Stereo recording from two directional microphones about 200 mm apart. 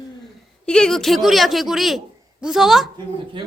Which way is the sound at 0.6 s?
5° left (ahead or behind).